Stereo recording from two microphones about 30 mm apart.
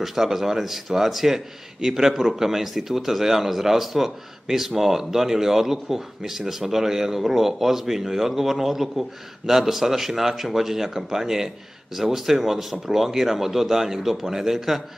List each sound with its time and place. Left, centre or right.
0.0 s speech: centre